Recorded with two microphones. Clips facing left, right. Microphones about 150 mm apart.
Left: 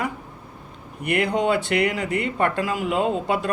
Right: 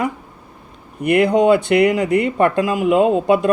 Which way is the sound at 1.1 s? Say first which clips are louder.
Right 8 dB; 15° right (ahead or behind).